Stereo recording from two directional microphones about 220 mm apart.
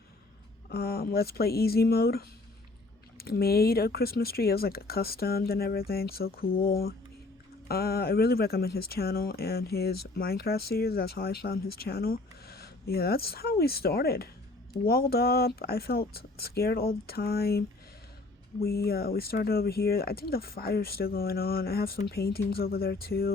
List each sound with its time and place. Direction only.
0.7 s speech: 45° left (ahead or behind)
18.6 s speech: 45° left (ahead or behind)